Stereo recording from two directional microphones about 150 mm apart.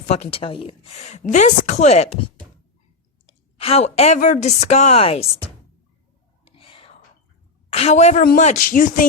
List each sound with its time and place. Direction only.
0.1 s a woman's voice: 40° left (ahead or behind)
3.2 s a woman's voice: 40° left (ahead or behind)
6.4 s whispering: 35° left (ahead or behind)
7.7 s a woman's voice: 45° left (ahead or behind)
8.2 s speech: 60° left (ahead or behind)